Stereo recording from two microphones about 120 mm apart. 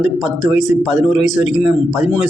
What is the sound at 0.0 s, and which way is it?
Speech, 5° right (ahead or behind).